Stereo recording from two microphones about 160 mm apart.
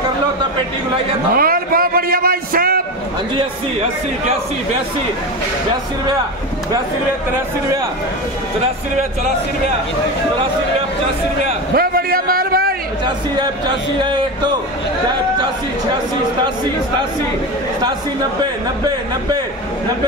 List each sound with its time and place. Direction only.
1.3 s a man's voice: 65° right (ahead or behind)
11.7 s a sound: 70° right (ahead or behind)
14.0 s speech: 30° right (ahead or behind)